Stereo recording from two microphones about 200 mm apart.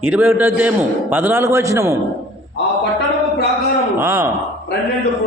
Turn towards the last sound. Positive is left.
turn(degrees=-15)  # may be behind; listen again after turning